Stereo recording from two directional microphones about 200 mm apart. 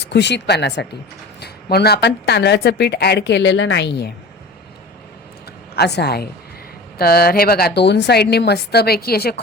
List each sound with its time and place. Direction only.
0.0 s a woman's voice: 60° left (ahead or behind)
5.7 s speech: 55° left (ahead or behind)